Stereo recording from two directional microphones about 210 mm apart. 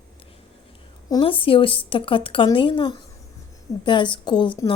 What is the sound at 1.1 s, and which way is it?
A woman's voice, 25° left (ahead or behind).